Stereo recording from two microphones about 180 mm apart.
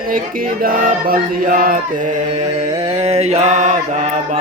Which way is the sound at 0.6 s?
50° right (ahead or behind).